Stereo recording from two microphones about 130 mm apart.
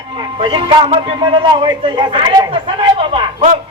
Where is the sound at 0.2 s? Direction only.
40° right (ahead or behind).